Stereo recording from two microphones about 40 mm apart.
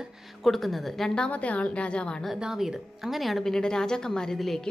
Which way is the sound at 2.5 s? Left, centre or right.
Centre.